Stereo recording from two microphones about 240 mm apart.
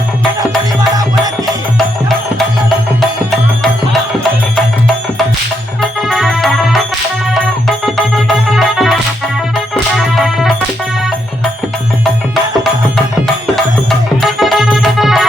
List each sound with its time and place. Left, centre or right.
0.8 s music: centre
6.0 s music: centre
7.9 s music: centre
14.2 s music: centre